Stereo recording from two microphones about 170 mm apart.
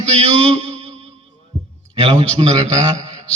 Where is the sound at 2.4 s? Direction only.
35° right (ahead or behind).